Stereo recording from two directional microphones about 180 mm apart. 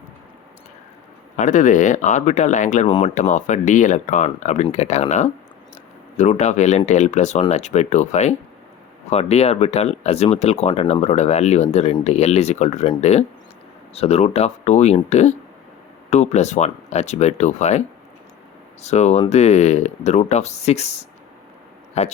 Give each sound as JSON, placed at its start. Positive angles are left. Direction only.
{"t": 1.4, "sound": "speech", "side_deg": 45}